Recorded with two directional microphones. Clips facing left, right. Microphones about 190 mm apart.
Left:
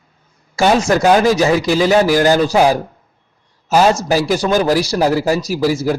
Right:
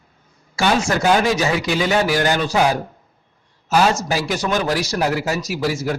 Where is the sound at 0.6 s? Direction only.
35° left (ahead or behind).